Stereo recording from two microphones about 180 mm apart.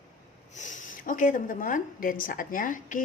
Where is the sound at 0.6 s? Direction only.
45° left (ahead or behind).